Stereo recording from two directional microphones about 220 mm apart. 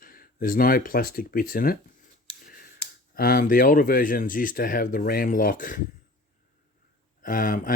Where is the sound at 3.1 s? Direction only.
40° left (ahead or behind).